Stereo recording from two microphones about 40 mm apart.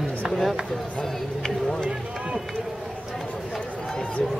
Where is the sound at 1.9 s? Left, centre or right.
Centre.